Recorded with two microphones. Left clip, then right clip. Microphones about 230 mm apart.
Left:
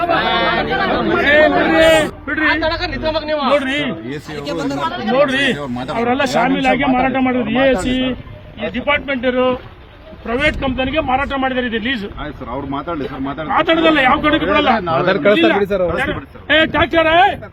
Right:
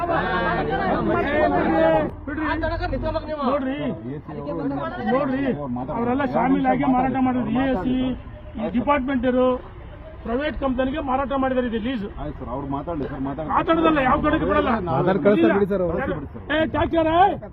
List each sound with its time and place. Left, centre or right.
0.0 s a sound: left
4.4 s a man's voice: left
10.2 s a man's voice: left
13.5 s a man's voice: left
15.0 s a man's voice: right
15.4 s a man's voice: left